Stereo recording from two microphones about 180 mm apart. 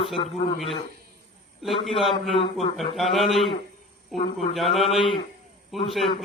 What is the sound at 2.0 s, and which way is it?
Speech, centre (ahead or behind).